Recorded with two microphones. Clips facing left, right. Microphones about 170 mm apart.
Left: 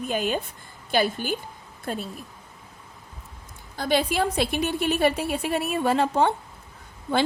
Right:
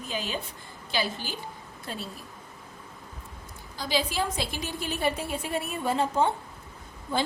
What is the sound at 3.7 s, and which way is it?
A woman's voice, 55° left (ahead or behind).